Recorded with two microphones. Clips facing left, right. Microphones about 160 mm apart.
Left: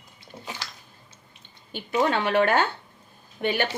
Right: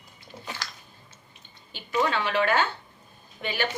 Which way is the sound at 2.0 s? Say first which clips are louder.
Left 5 dB; 55° left (ahead or behind).